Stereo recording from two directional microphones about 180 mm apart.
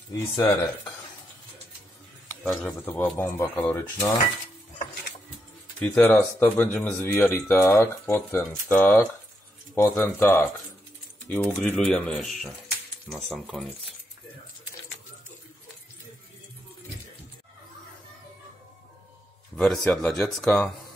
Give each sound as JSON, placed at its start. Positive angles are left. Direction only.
{"t": 0.1, "sound": "speech", "side_deg": 15}
{"t": 2.2, "sound": "speech", "side_deg": 15}
{"t": 5.8, "sound": "speech", "side_deg": 10}
{"t": 19.5, "sound": "speech", "side_deg": 5}